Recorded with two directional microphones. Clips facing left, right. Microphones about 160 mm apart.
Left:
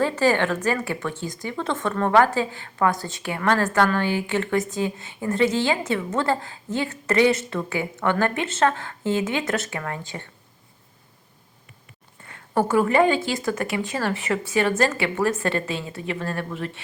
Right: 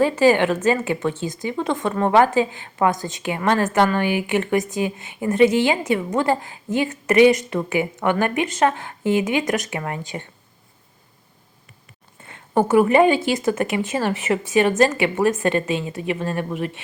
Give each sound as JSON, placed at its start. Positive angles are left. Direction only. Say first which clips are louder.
{"t": 0.0, "sound": "a woman's voice", "louder": "right 5 dB", "side_deg": -15}
{"t": 12.2, "sound": "a woman's voice", "louder": "right 3 dB", "side_deg": -20}